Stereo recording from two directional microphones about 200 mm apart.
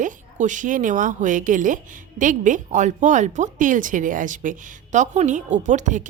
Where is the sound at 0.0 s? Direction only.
40° right (ahead or behind).